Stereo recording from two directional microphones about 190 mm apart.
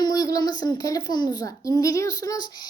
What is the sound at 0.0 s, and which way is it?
A child's voice, 20° left (ahead or behind).